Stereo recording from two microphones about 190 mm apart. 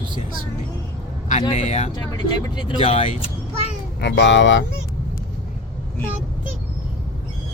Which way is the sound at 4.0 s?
65° left (ahead or behind).